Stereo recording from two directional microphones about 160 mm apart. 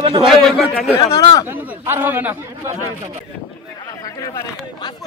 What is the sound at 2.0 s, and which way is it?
Speech, 10° right (ahead or behind).